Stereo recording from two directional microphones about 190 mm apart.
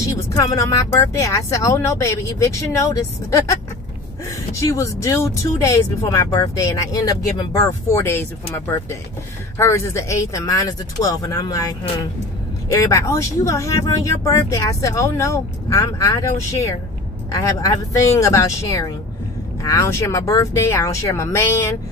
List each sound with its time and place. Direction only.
0.2 s speech: 20° left (ahead or behind)
4.6 s speech: 15° left (ahead or behind)